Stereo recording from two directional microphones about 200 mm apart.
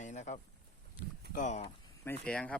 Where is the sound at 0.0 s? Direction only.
35° left (ahead or behind).